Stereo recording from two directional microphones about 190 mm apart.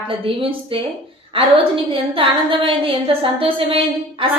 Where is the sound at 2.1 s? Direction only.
25° right (ahead or behind).